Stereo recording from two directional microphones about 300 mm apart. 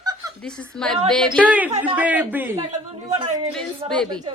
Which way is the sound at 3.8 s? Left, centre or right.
Centre.